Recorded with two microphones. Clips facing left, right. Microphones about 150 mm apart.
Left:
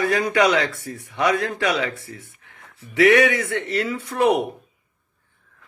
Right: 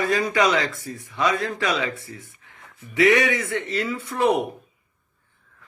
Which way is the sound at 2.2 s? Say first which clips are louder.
Even; 65° left (ahead or behind).